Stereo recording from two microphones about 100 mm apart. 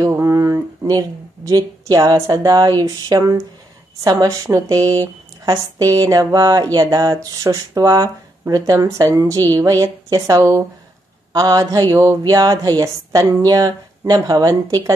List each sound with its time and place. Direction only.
0.0 s speech: 35° right (ahead or behind)